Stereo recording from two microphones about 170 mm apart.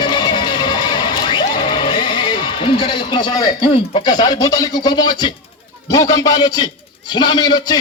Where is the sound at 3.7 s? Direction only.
30° left (ahead or behind).